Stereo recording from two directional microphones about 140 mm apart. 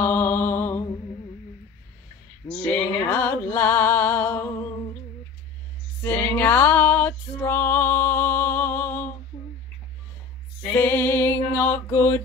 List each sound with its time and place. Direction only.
0.0 s mantra: 15° left (ahead or behind)
2.6 s music: 10° left (ahead or behind)
6.3 s female singing: 15° left (ahead or behind)
10.7 s music: 15° left (ahead or behind)